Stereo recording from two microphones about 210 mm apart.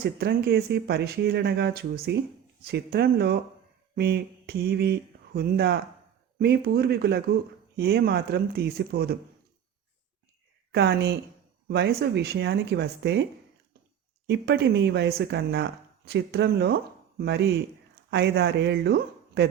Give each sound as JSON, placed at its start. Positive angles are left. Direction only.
{"t": 0.0, "sound": "speech", "side_deg": -50}
{"t": 3.9, "sound": "a sound", "side_deg": -50}
{"t": 6.4, "sound": "speech", "side_deg": -50}
{"t": 10.8, "sound": "speech", "side_deg": -55}
{"t": 14.3, "sound": "speech", "side_deg": -50}